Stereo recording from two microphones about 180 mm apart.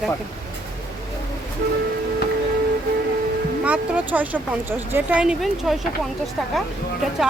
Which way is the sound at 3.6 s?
10° right (ahead or behind).